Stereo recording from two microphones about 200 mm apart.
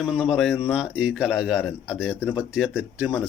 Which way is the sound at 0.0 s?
Centre (ahead or behind).